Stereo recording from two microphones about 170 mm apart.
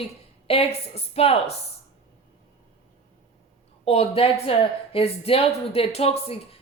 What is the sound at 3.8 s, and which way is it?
A woman's voice, 35° left (ahead or behind).